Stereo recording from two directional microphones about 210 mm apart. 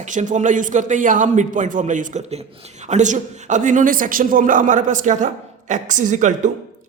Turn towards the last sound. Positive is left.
turn(degrees=-35)  # may be behind; listen again after turning